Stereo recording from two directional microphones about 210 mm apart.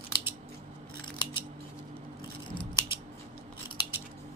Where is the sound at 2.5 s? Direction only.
25° left (ahead or behind).